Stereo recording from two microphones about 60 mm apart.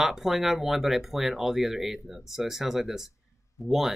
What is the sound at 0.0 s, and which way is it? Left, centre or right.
Speech, centre.